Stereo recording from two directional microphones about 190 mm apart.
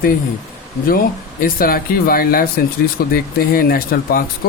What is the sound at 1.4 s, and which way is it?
Speech, 50° left (ahead or behind).